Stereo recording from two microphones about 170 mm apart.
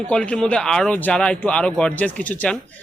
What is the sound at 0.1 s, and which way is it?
Speech, 5° left (ahead or behind).